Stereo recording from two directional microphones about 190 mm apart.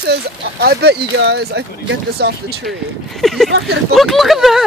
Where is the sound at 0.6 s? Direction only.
60° right (ahead or behind).